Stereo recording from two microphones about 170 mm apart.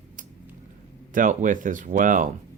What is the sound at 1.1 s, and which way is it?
Speech, 50° right (ahead or behind).